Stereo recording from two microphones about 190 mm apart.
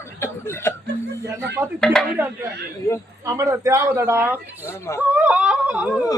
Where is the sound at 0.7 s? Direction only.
15° left (ahead or behind).